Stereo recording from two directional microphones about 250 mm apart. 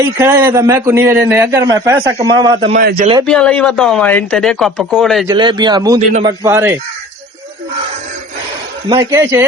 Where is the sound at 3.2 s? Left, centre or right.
Centre.